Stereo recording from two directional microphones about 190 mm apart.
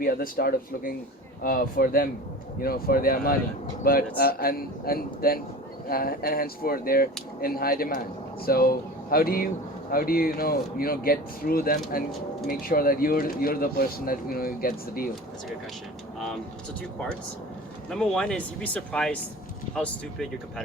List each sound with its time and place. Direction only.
0.0 s speech: 50° left (ahead or behind)
17.9 s speech: 5° left (ahead or behind)